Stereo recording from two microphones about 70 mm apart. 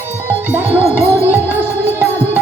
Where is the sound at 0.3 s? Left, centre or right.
Right.